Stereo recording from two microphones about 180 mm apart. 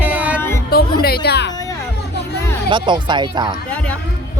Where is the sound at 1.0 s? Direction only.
60° left (ahead or behind).